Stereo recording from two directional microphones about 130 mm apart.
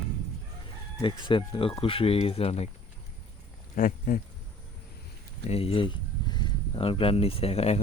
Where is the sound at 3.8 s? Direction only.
90° left.